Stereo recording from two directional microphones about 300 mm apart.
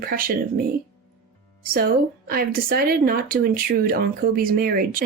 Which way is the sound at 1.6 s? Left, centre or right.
Right.